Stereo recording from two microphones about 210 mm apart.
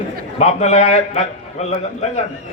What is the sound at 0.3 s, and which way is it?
A man's voice, 30° left (ahead or behind).